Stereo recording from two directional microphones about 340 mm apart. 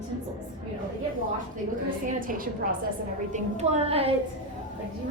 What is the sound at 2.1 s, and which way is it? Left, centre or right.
A woman's voice, right.